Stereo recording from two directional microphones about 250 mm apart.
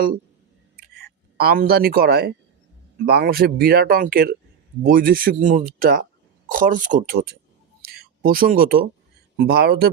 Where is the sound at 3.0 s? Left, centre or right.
Right.